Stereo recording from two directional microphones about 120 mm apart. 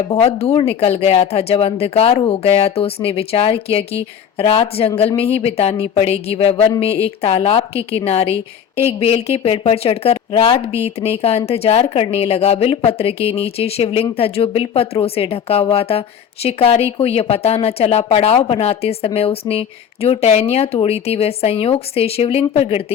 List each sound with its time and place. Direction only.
0.2 s a woman's voice: 55° left (ahead or behind)